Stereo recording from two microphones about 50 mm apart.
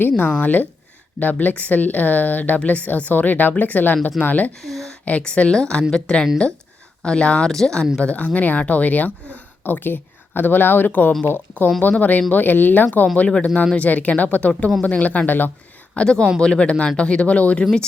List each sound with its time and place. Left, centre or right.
0.3 s speech: left
4.5 s speech: centre
5.0 s a woman's voice: left
7.5 s speech: centre
7.9 s speech: left
13.1 s a woman's voice: left
16.0 s a woman's voice: centre